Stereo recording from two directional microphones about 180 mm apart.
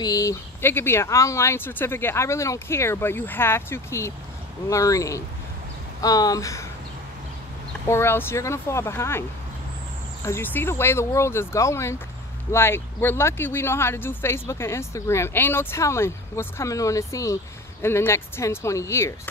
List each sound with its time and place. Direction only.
0.0 s speech: 20° left (ahead or behind)
7.9 s speech: 15° left (ahead or behind)
10.2 s speech: 15° left (ahead or behind)